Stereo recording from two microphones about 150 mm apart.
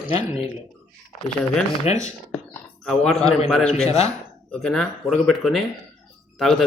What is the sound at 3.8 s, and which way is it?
Speech, 45° left (ahead or behind).